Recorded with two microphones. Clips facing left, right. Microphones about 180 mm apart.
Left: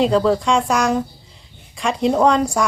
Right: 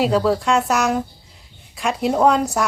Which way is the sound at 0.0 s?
5° right (ahead or behind).